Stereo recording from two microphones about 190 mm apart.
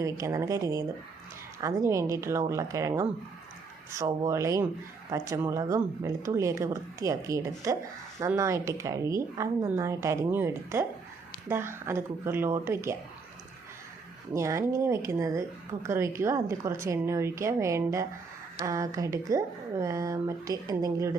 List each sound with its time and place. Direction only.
0.0 s a woman's voice: 15° right (ahead or behind)
14.3 s a woman's voice: 15° right (ahead or behind)